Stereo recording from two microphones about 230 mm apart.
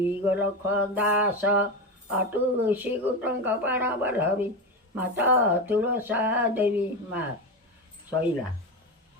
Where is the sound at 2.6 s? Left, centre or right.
Centre.